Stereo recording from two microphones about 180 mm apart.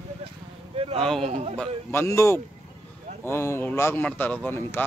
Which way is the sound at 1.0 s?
Centre (ahead or behind).